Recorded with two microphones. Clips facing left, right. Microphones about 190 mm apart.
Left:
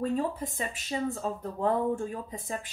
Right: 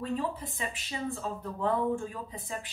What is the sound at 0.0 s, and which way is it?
Speech, 45° left (ahead or behind).